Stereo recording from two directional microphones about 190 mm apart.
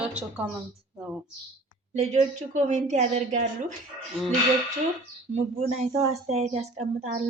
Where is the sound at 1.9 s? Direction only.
40° right (ahead or behind).